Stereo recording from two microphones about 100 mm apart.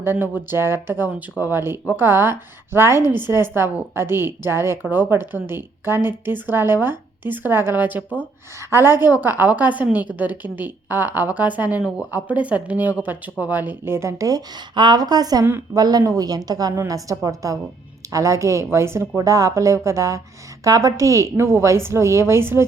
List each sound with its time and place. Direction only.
0.0 s a woman's voice: 20° right (ahead or behind)